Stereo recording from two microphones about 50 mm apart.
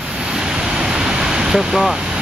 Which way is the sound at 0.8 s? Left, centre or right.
Centre.